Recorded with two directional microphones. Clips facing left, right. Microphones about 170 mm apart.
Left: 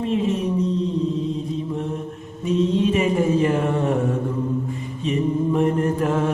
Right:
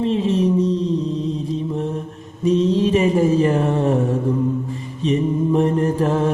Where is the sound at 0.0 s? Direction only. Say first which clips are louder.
Right 2 dB; 30° right (ahead or behind).